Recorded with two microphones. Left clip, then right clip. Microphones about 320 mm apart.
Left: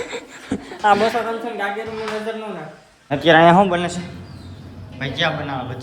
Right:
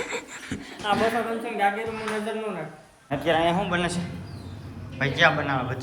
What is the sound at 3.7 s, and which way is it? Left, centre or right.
Speech, centre.